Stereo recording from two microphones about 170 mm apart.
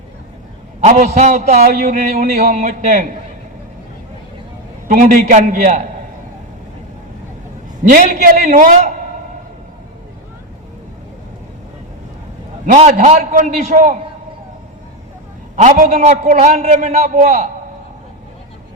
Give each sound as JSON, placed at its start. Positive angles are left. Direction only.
{"t": 0.9, "sound": "a man's voice", "side_deg": -45}
{"t": 4.9, "sound": "a man's voice", "side_deg": -50}
{"t": 7.9, "sound": "a man's voice", "side_deg": -50}
{"t": 12.6, "sound": "a man's voice", "side_deg": -50}
{"t": 15.5, "sound": "a man's voice", "side_deg": -50}